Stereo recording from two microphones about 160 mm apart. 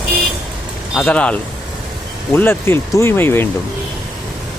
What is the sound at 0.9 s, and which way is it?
Speech, 5° left (ahead or behind).